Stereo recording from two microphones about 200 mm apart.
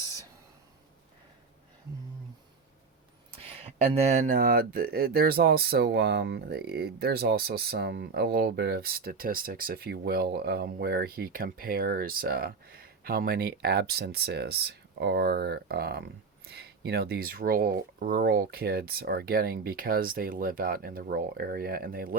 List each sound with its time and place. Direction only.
3.6 s speech: 30° right (ahead or behind); by 22.2 s 45° right (ahead or behind)